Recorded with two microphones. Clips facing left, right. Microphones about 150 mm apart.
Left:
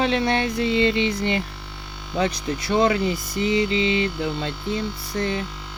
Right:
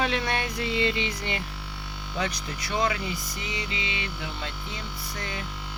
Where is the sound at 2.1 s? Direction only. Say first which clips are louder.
Left 8 dB; 30° left (ahead or behind).